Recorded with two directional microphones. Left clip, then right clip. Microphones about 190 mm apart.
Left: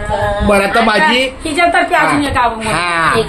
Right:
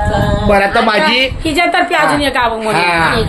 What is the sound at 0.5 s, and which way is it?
Speech, 15° left (ahead or behind).